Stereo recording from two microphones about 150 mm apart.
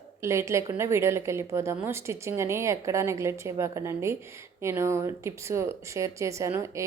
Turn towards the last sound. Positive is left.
turn(degrees=-20)  # may be behind; listen again after turning